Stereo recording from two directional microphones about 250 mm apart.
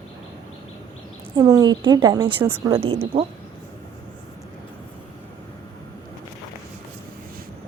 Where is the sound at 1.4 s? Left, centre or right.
Centre.